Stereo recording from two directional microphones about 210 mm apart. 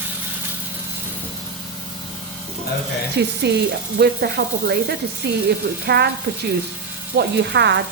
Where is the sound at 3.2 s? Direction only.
55° right (ahead or behind).